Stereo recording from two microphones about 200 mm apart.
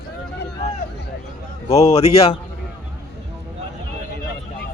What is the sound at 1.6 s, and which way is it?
Speech, 30° left (ahead or behind).